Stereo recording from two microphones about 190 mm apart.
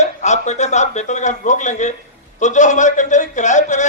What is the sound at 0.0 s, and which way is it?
A man's voice, 40° left (ahead or behind).